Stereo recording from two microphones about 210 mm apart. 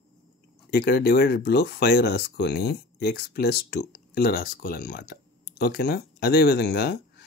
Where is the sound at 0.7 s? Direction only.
50° left (ahead or behind).